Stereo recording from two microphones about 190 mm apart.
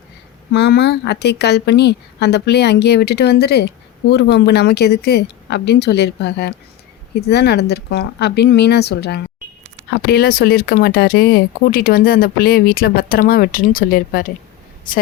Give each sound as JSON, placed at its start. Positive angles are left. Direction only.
{"t": 0.5, "sound": "speech", "side_deg": 60}